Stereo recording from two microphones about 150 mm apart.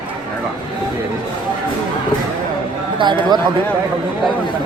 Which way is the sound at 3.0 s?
30° right (ahead or behind).